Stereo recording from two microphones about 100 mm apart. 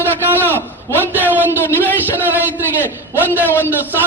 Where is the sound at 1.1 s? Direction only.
20° right (ahead or behind).